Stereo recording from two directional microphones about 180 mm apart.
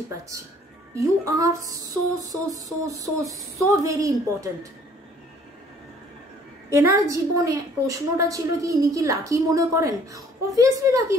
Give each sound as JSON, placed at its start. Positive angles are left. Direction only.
{"t": 0.9, "sound": "a woman's voice", "side_deg": -20}
{"t": 2.2, "sound": "a sound", "side_deg": -20}
{"t": 6.7, "sound": "a woman's voice", "side_deg": -20}